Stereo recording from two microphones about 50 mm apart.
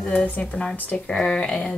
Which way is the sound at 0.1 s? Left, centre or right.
Centre.